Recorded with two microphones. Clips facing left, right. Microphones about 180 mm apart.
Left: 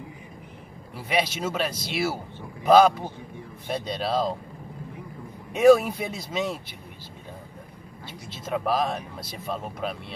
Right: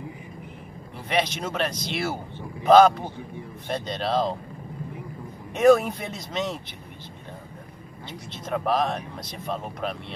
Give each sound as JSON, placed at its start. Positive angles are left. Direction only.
{"t": 1.0, "sound": "speech", "side_deg": 5}
{"t": 5.5, "sound": "speech", "side_deg": 5}
{"t": 8.3, "sound": "speech", "side_deg": 5}